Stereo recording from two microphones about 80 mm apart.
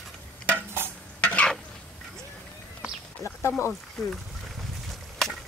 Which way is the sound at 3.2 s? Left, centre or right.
Left.